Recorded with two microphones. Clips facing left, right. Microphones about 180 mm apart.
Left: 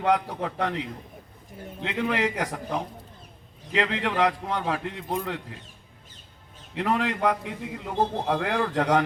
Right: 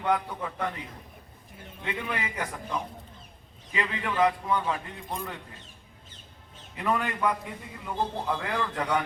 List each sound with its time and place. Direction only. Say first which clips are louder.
0.0 s a man's voice: left 4 dB; 75° left (ahead or behind)
6.7 s a man's voice: left 3 dB; 75° left (ahead or behind)
8.8 s a man's voice: left 7 dB; 75° left (ahead or behind)